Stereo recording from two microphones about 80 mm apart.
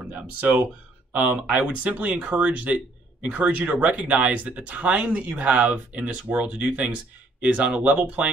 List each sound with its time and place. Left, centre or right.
0.1 s speech: centre